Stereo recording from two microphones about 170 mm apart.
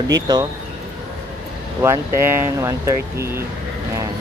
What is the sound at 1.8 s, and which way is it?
Speech, 15° right (ahead or behind).